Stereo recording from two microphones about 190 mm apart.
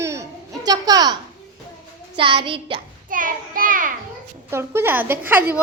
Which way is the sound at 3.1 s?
45° right (ahead or behind).